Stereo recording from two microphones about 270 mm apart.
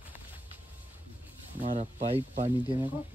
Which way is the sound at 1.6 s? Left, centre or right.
Right.